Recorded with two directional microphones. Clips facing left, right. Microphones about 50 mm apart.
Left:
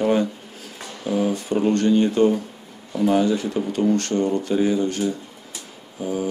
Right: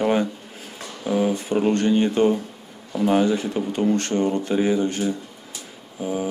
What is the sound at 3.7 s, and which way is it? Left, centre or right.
Speech, right.